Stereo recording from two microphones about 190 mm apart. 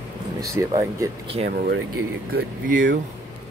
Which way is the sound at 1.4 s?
55° right (ahead or behind).